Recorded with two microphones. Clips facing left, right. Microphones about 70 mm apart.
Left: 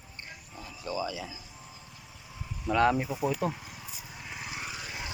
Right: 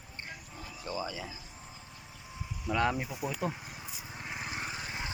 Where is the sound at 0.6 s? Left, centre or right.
Right.